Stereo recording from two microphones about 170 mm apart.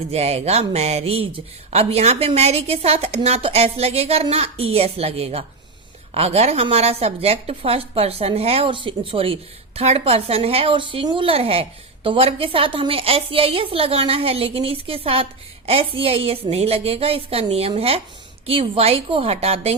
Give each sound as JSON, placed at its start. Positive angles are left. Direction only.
{"t": 0.1, "sound": "a woman's voice", "side_deg": -40}